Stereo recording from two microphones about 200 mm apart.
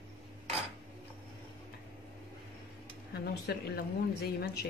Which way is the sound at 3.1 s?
55° left (ahead or behind).